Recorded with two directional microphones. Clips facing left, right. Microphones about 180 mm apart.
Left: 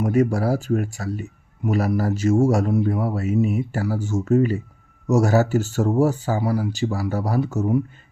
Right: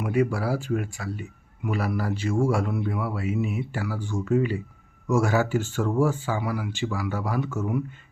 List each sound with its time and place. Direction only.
0.0 s speech: 45° left (ahead or behind)